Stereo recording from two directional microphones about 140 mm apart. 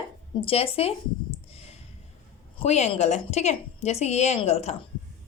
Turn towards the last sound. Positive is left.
turn(degrees=45)  # may be behind; listen again after turning